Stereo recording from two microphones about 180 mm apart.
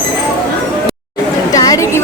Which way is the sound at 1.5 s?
20° left (ahead or behind).